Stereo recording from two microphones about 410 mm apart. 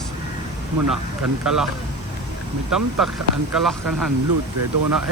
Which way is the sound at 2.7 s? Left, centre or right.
Right.